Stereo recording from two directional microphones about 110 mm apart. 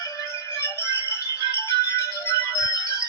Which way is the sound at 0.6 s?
25° left (ahead or behind).